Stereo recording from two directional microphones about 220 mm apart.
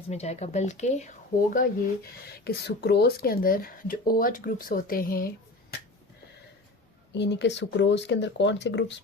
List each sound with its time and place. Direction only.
0.1 s speech: 30° left (ahead or behind)
2.4 s speech: 50° left (ahead or behind)
7.1 s speech: 55° left (ahead or behind)